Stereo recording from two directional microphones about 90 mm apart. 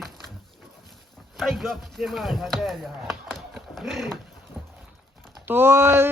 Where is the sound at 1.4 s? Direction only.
Centre (ahead or behind).